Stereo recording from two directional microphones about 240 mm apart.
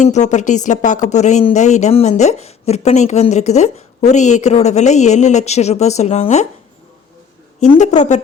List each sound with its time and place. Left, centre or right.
0.0 s speech: left
7.6 s speech: left